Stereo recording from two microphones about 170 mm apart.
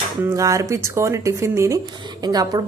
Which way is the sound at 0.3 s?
20° right (ahead or behind).